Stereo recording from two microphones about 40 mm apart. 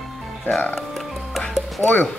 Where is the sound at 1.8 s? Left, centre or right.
Left.